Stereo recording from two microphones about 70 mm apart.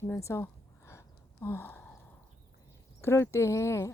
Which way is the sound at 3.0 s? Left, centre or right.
Left.